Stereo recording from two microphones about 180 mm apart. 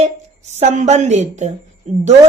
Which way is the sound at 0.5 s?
40° right (ahead or behind).